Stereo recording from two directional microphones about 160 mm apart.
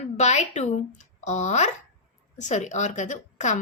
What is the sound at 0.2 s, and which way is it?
A woman's voice, 45° left (ahead or behind).